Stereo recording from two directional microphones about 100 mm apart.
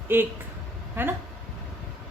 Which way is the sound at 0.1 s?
20° right (ahead or behind).